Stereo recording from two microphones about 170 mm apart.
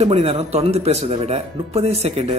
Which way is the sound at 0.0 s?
35° right (ahead or behind).